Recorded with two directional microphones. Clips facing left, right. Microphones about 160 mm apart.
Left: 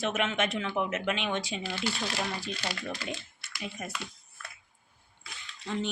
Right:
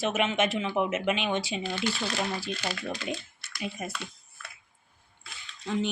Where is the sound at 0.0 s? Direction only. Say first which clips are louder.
Right 3 dB; 5° right (ahead or behind).